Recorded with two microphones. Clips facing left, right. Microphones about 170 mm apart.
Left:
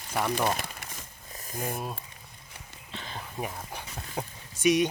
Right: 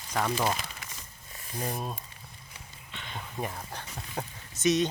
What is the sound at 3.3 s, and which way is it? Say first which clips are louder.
Speech: even; 5° left (ahead or behind).